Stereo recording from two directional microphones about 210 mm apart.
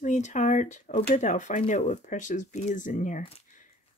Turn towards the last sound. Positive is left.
turn(degrees=35)  # may be behind; listen again after turning